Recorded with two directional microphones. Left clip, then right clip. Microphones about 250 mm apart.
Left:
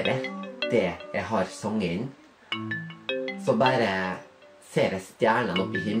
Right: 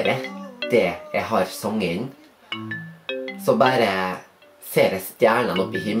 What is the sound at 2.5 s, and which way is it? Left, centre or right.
Music, centre.